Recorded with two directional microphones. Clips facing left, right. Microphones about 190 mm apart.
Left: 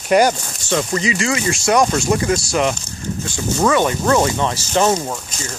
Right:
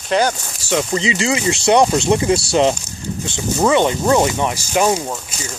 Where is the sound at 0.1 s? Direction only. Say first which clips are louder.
Left 3 dB; 10° left (ahead or behind).